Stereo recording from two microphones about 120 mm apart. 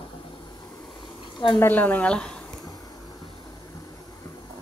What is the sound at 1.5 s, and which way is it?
Speech, 15° left (ahead or behind).